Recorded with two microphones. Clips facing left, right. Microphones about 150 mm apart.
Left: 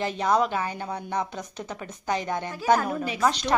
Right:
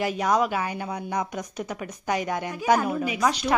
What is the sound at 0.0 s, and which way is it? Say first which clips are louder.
Speech: even; 10° right (ahead or behind).